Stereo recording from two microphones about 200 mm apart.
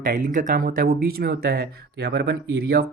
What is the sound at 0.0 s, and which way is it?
Speech, 40° right (ahead or behind).